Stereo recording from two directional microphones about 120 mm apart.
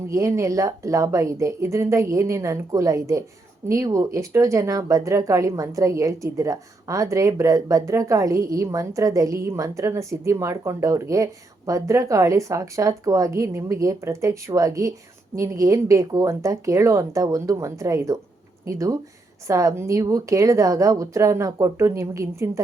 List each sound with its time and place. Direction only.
0.1 s speech: 25° right (ahead or behind)